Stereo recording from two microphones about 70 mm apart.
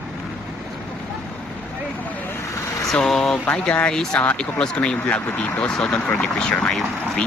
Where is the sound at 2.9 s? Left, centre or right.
Centre.